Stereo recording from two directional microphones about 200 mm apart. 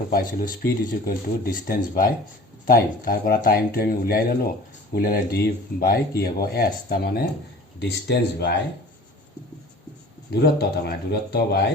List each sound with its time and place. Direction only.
0.1 s speech: 50° left (ahead or behind)
10.3 s speech: 55° left (ahead or behind)